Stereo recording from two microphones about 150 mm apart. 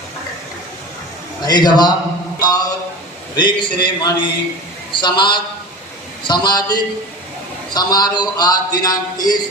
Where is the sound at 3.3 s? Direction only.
30° left (ahead or behind).